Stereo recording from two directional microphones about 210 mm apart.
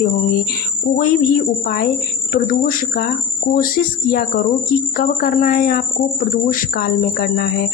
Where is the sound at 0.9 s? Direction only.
40° left (ahead or behind).